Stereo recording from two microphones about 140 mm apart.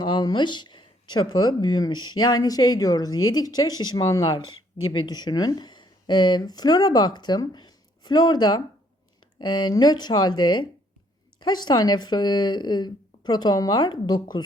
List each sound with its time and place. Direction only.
0.0 s speech: 30° left (ahead or behind)